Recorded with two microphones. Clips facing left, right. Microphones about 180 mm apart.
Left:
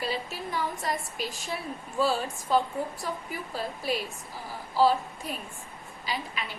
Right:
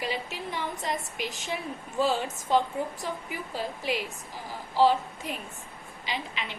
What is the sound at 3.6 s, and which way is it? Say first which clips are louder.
Speech: even; 15° right (ahead or behind).